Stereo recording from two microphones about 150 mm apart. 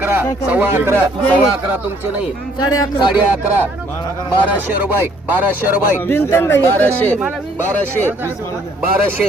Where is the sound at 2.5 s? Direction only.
25° left (ahead or behind).